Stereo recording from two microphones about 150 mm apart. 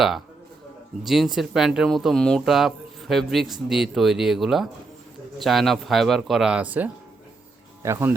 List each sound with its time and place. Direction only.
1.0 s speech: centre (ahead or behind); by 8.1 s 20° right (ahead or behind)